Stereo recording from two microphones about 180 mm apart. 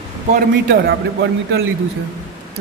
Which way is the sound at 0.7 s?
80° right.